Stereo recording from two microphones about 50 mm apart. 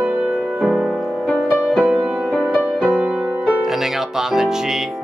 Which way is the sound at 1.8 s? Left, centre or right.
Right.